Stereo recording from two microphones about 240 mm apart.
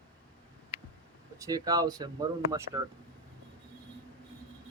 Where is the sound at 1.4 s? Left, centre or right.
Centre.